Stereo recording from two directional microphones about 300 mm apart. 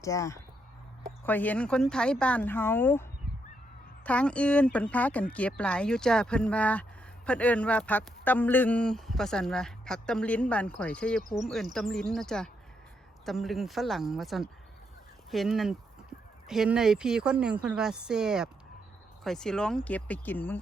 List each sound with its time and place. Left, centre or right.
0.0 s speech: centre